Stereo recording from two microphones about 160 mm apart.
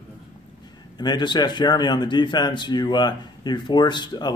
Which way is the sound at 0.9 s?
30° left (ahead or behind).